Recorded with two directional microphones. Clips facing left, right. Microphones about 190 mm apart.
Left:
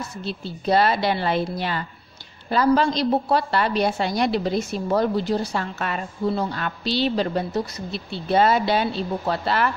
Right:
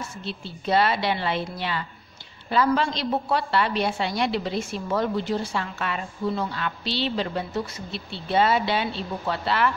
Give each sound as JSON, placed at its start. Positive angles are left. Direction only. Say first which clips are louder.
{"t": 0.0, "sound": "a woman's voice", "louder": "left 4 dB", "side_deg": 40}